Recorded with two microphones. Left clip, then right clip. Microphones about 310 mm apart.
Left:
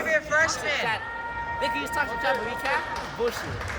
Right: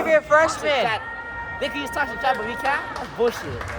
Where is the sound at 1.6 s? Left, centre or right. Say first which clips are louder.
Right 2 dB; right.